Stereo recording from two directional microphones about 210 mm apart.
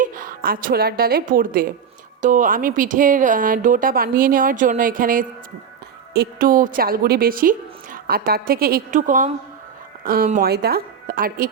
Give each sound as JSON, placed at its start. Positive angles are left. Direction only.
{"t": 0.0, "sound": "a woman's voice", "side_deg": -40}